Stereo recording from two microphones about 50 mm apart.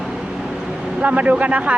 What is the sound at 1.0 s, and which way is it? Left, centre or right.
Speech, right.